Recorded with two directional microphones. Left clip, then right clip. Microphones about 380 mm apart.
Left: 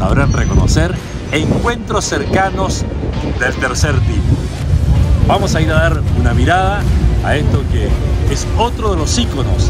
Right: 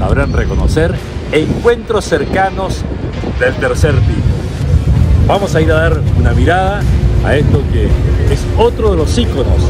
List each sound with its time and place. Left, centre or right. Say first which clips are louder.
0.0 s speech: right 1 dB; centre
5.3 s speech: right 3 dB; centre
8.5 s speech: right 5 dB; centre